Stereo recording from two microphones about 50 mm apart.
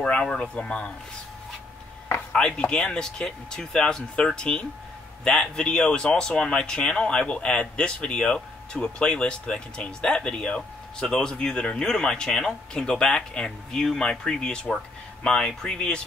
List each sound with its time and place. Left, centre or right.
0.0 s speech: centre
2.3 s speech: centre